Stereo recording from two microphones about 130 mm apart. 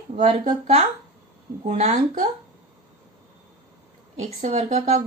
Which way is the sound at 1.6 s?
60° right (ahead or behind).